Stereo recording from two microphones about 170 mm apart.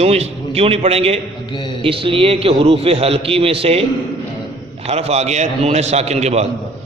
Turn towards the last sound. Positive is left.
turn(degrees=-40)  # may be behind; listen again after turning